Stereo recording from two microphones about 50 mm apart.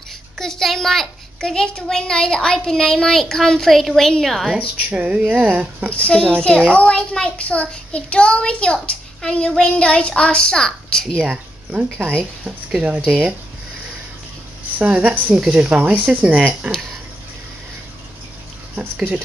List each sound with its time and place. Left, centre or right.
0.4 s a child's voice: centre
4.8 s a woman's voice: right
5.9 s a child's voice: left
11.1 s a woman's voice: right
14.8 s a woman's voice: right
15.3 s speech: centre
15.8 s speech: right